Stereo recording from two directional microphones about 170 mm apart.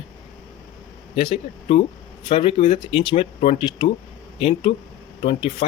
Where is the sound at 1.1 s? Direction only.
30° left (ahead or behind).